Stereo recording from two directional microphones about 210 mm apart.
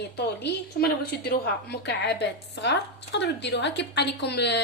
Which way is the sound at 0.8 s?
50° left (ahead or behind).